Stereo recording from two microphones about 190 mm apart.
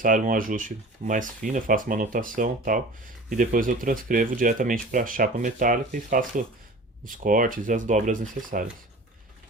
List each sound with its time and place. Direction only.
0.0 s speech: 45° right (ahead or behind)